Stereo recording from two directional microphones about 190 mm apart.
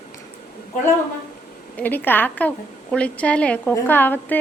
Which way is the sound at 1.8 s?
10° left (ahead or behind).